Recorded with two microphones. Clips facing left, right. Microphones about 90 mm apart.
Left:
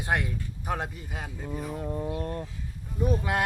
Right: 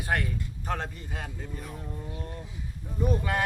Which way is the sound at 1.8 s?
40° left (ahead or behind).